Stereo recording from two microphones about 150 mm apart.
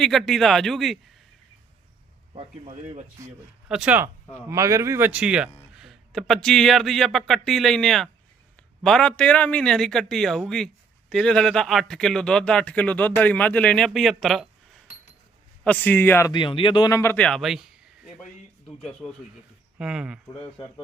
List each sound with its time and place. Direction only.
0.0 s speech: centre (ahead or behind)
2.3 s speech: 45° right (ahead or behind)
3.7 s speech: 5° right (ahead or behind)
4.4 s speech: 20° right (ahead or behind); by 14.4 s centre (ahead or behind)
15.6 s a man's voice: 10° left (ahead or behind)
16.3 s speech: 35° left (ahead or behind)
17.0 s a man's voice: 10° left (ahead or behind)
19.8 s speech: 5° right (ahead or behind)